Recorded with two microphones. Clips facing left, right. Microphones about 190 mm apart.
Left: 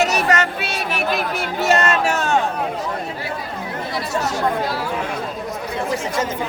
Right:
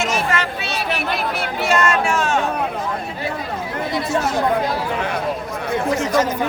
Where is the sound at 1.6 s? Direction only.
40° left (ahead or behind).